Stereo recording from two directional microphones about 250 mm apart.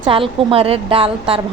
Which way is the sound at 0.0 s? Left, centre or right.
Right.